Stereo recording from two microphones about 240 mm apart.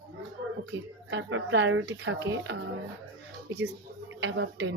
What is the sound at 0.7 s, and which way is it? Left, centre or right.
A woman's voice, right.